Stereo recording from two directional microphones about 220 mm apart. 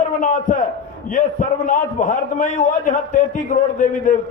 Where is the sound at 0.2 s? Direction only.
35° left (ahead or behind).